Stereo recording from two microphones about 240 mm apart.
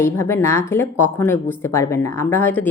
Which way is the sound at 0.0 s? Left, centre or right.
Centre.